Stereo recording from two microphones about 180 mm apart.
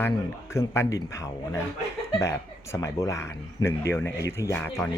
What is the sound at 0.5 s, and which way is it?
Speech, 15° left (ahead or behind).